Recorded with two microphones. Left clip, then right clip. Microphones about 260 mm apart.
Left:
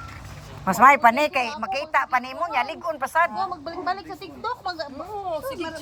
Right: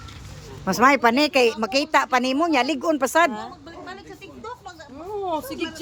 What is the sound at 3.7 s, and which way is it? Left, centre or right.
Speech, centre.